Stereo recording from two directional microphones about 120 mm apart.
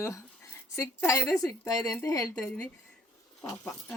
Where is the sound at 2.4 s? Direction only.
10° left (ahead or behind).